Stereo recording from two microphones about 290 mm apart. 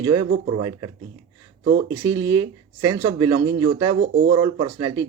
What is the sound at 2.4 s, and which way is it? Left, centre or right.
Speech, right.